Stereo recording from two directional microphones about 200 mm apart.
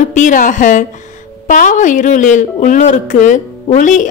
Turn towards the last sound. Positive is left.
turn(degrees=40)  # may be behind; listen again after turning